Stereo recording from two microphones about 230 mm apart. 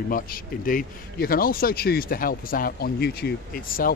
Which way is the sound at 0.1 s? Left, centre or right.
Left.